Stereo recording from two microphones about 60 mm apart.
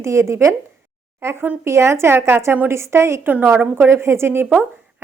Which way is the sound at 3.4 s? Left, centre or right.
Right.